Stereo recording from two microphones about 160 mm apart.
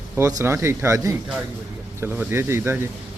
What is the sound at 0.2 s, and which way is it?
Speech, 20° right (ahead or behind).